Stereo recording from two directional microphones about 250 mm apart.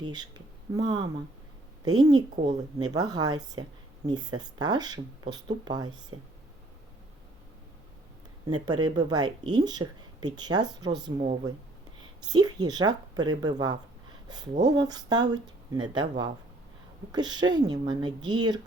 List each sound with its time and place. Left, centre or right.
0.1 s speech: centre
2.3 s a woman's voice: right
2.7 s speech: centre
8.6 s speech: centre